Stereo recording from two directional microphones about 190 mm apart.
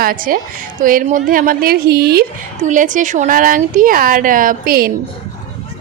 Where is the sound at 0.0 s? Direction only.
50° right (ahead or behind).